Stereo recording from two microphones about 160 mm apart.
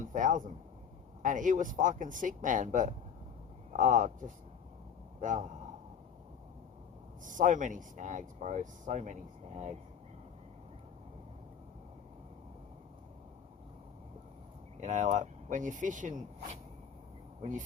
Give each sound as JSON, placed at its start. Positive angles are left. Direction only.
{"t": 0.0, "sound": "speech", "side_deg": -55}
{"t": 7.3, "sound": "speech", "side_deg": -55}
{"t": 14.8, "sound": "speech", "side_deg": -50}